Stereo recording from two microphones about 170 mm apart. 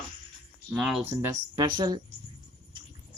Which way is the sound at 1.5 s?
25° right (ahead or behind).